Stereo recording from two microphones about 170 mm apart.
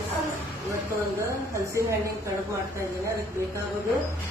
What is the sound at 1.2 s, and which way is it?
Speech, 15° right (ahead or behind).